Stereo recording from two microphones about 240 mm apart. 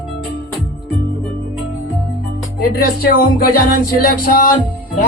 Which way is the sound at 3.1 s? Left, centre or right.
Left.